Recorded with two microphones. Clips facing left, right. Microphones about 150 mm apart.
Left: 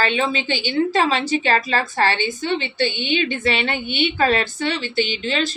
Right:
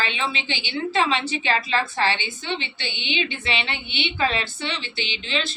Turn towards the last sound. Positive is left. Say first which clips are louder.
# left 6 dB
turn(degrees=40)  # may be behind; listen again after turning